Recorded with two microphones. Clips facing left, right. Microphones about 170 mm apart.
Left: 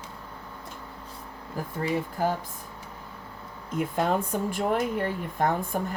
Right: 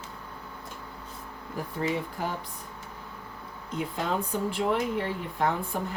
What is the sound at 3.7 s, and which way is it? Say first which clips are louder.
Speech: left 4 dB; 50° left (ahead or behind).